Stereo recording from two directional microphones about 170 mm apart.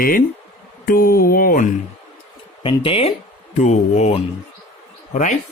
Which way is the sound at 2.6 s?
30° left (ahead or behind).